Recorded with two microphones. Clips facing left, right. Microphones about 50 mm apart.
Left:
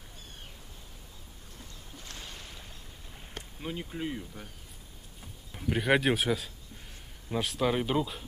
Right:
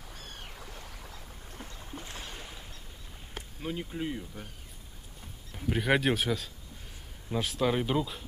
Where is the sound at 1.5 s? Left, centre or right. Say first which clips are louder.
Right 6 dB; right.